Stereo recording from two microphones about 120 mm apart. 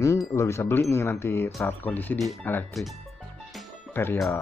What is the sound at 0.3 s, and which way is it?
Speech, 20° left (ahead or behind).